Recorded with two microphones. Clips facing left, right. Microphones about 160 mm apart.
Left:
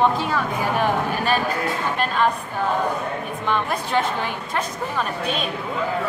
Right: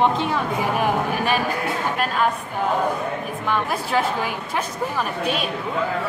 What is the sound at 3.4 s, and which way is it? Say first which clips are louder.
A woman's voice: even; 5° right (ahead or behind).